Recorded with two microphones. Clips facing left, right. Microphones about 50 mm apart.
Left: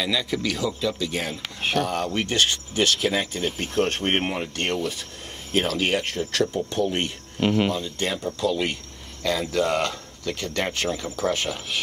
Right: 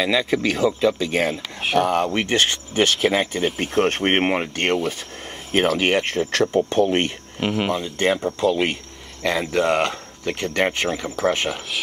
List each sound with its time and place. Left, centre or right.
0.0 s speech: right
7.3 s speech: centre
7.7 s speech: right